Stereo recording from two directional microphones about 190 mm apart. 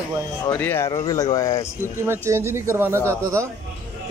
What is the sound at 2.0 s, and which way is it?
Speech, 15° right (ahead or behind).